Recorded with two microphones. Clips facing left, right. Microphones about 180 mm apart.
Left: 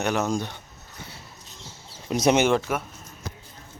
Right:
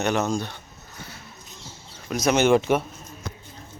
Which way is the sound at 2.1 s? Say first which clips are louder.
Left 2 dB; 30° left (ahead or behind).